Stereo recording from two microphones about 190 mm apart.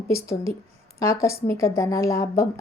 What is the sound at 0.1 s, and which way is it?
A woman's voice, 15° left (ahead or behind).